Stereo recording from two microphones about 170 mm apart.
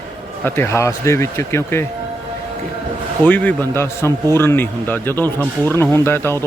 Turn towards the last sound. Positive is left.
turn(degrees=15)  # may be behind; listen again after turning